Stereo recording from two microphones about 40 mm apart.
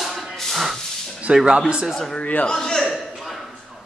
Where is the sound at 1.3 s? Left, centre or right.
Centre.